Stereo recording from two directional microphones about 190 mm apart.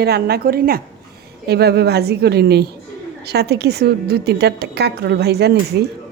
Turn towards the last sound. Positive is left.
turn(degrees=-60)  # may be behind; listen again after turning